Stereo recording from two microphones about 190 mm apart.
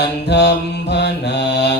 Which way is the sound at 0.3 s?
60° left (ahead or behind).